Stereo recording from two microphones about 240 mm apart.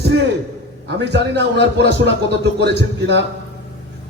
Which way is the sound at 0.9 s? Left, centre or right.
Right.